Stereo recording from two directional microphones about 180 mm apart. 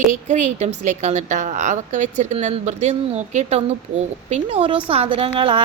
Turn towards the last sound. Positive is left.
turn(degrees=-30)  # may be behind; listen again after turning